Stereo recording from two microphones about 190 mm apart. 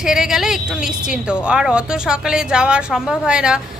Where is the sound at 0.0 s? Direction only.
5° right (ahead or behind).